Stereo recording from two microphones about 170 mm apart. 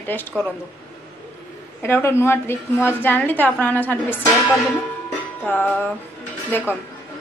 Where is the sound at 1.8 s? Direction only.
15° left (ahead or behind).